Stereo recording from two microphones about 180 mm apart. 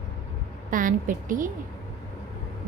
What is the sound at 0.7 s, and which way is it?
Speech, 50° right (ahead or behind).